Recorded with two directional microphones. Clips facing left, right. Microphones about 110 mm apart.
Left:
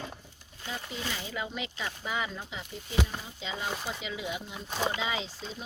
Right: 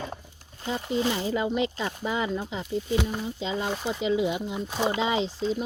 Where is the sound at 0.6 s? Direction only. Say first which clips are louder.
Right 11 dB; 30° right (ahead or behind).